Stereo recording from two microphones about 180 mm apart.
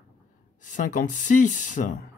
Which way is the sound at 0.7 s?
45° left (ahead or behind).